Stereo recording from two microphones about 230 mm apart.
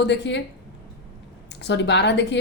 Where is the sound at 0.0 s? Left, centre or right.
Left.